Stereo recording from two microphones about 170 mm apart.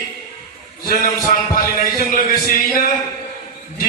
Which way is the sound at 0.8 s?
55° left (ahead or behind).